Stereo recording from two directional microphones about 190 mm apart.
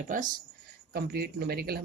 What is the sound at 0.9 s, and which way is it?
Speech, 55° right (ahead or behind).